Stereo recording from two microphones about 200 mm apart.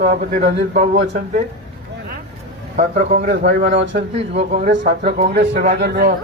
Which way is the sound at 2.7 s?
35° right (ahead or behind).